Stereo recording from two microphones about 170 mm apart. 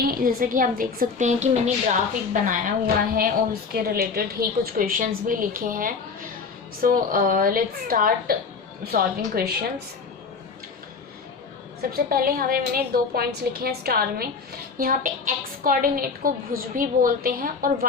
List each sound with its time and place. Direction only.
0.0 s a woman's voice: 55° right (ahead or behind)
2.3 s a woman's voice: 55° right (ahead or behind)
11.9 s a woman's voice: 60° right (ahead or behind)